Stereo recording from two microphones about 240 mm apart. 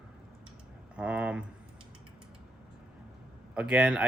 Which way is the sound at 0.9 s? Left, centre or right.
Centre.